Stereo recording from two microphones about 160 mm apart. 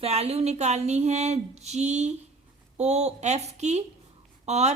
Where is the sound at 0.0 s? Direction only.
40° right (ahead or behind).